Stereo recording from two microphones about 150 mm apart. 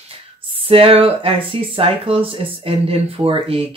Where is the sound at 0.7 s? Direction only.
40° right (ahead or behind).